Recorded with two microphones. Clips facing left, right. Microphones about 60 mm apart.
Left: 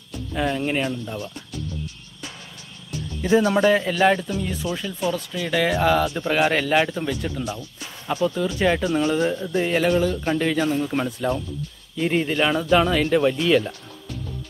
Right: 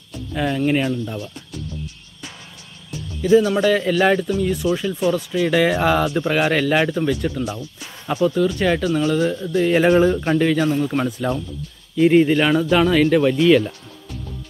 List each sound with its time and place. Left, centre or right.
0.3 s speech: centre
3.2 s speech: left
3.8 s speech: centre
9.8 s a man's voice: right
10.2 s speech: centre